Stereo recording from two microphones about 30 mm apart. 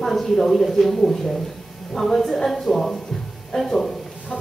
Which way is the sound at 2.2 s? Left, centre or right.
Left.